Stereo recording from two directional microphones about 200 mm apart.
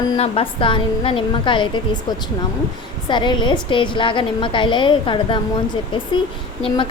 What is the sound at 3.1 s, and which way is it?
A woman's voice, 25° left (ahead or behind).